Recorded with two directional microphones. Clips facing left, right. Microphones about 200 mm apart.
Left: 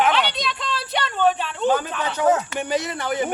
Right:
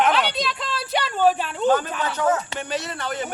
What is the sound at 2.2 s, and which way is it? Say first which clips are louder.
Speech: left 4 dB; 15° left (ahead or behind).